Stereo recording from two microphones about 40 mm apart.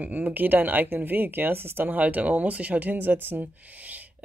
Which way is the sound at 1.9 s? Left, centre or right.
Right.